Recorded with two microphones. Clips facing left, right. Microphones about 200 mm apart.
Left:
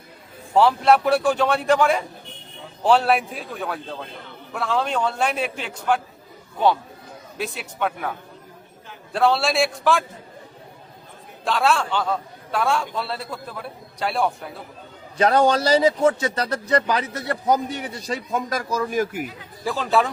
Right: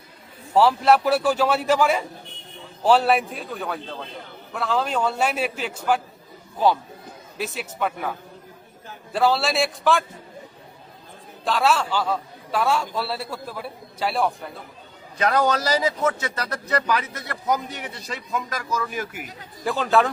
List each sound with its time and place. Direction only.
0.5 s a man's voice: centre (ahead or behind)
7.3 s a man's voice: centre (ahead or behind)
9.1 s a man's voice: centre (ahead or behind)
11.4 s a man's voice: centre (ahead or behind)
15.2 s a man's voice: 30° left (ahead or behind)
19.6 s a man's voice: centre (ahead or behind)